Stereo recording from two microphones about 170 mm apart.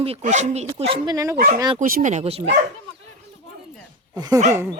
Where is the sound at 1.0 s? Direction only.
20° right (ahead or behind).